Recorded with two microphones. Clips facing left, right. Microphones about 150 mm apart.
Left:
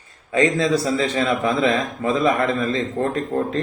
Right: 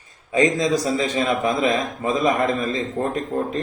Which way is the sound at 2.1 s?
30° left (ahead or behind).